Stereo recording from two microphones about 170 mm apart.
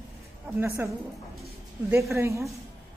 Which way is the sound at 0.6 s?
15° right (ahead or behind).